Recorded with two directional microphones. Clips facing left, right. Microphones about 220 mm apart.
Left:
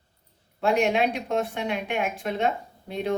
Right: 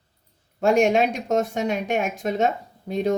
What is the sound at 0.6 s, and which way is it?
Speech, 45° right (ahead or behind).